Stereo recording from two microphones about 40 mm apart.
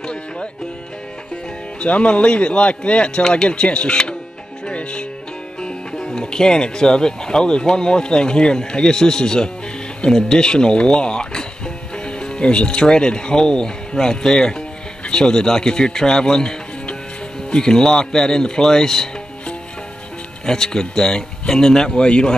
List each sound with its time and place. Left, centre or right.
0.0 s music: left
1.8 s speech: left
6.1 s speech: centre
20.4 s speech: centre